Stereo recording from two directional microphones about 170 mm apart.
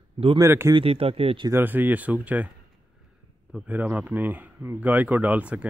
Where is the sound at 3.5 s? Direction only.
10° right (ahead or behind).